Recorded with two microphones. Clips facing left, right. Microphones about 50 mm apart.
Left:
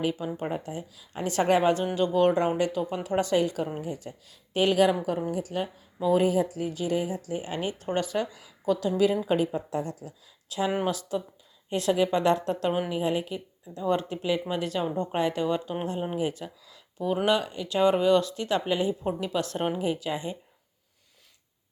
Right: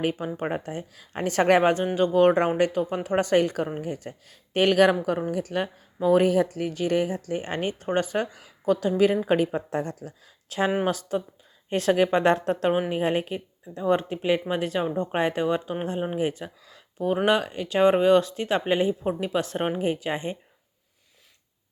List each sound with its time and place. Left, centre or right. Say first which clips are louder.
0.0 s speech: right 2 dB; right
2.0 s speech: right 5 dB; right
7.9 s speech: right 3 dB; right
12.1 s speech: right 3 dB; right
13.7 s speech: right 3 dB; right
19.8 s speech: right 2 dB; right